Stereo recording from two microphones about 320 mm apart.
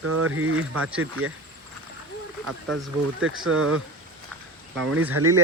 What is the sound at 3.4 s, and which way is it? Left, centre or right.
Speech, right.